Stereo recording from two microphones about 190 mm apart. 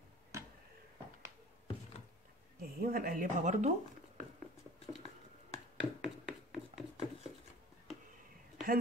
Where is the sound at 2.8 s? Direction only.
50° right (ahead or behind).